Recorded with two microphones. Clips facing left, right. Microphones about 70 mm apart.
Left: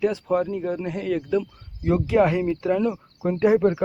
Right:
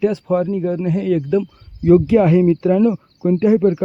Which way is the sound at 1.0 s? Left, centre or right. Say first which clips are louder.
Right 6 dB; left.